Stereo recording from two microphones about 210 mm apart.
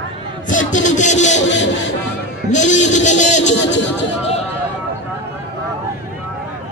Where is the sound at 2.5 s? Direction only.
35° left (ahead or behind).